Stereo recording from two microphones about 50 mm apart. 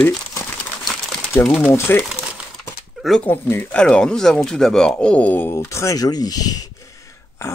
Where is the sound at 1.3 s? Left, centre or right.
Left.